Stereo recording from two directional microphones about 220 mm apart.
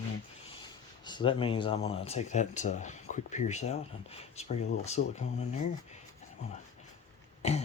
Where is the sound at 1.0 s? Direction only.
20° left (ahead or behind).